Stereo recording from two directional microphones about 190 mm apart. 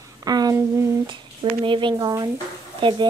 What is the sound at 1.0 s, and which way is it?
Speech, 25° right (ahead or behind).